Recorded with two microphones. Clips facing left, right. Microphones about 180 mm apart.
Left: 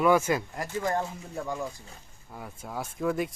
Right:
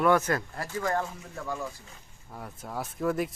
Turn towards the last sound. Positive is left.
turn(degrees=0)  # may be behind; listen again after turning